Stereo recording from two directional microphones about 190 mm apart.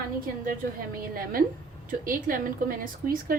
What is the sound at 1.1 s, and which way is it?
A woman's voice, 50° right (ahead or behind).